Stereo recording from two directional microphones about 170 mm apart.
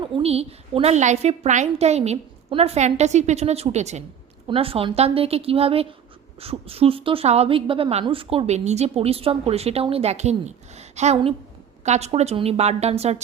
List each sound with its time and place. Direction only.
0.0 s a woman's voice: 35° right (ahead or behind)